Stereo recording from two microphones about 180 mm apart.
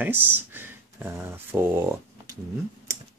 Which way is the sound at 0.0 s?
10° right (ahead or behind).